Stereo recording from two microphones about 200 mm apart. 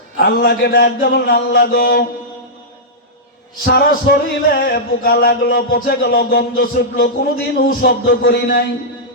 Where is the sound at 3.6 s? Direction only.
50° left (ahead or behind).